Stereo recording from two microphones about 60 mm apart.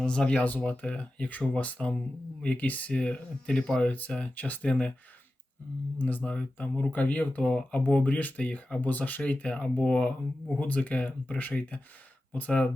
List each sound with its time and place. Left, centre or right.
0.0 s speech: centre
6.0 s speech: left